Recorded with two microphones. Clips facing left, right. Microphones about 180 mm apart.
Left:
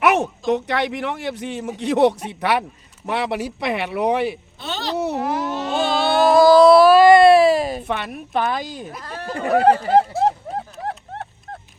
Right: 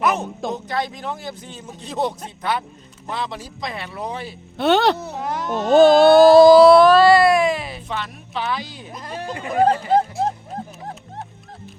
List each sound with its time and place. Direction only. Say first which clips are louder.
0.0 s speech: left 4 dB; 75° left (ahead or behind)
4.5 s speech: right 11 dB; 60° right (ahead or behind)
4.9 s speech: left 8 dB; 75° left (ahead or behind)
5.2 s a sound: left 3 dB; 5° left (ahead or behind)
5.6 s a sound: right 12 dB; 45° right (ahead or behind)
6.6 s baby cry: even; 5° left (ahead or behind); by 7.8 s 40° left (ahead or behind)
7.8 s speech: left 4 dB; 60° left (ahead or behind)
8.9 s speech: even; 15° right (ahead or behind)
9.5 s speech: left 2 dB; 75° left (ahead or behind)
10.8 s music: left 5 dB; 65° left (ahead or behind)